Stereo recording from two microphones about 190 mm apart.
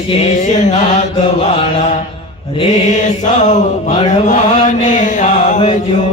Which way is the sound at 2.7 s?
40° left (ahead or behind).